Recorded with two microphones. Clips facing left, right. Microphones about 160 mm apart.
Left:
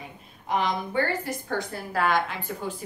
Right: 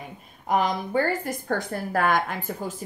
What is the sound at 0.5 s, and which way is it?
A woman's voice, 40° right (ahead or behind).